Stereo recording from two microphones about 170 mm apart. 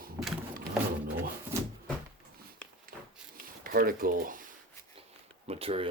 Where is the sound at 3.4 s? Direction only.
60° right (ahead or behind).